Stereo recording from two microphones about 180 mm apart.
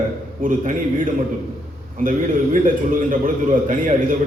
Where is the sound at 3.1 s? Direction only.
50° right (ahead or behind).